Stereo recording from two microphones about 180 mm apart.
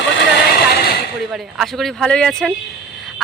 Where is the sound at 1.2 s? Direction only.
Centre (ahead or behind).